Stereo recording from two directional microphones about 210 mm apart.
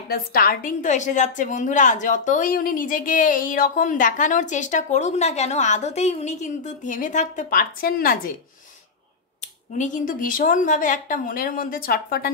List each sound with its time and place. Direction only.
0.1 s a woman's voice: 45° left (ahead or behind)
9.8 s a woman's voice: 40° left (ahead or behind)